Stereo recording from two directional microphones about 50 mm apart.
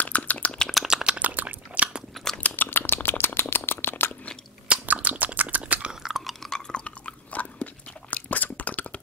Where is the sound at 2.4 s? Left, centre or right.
Left.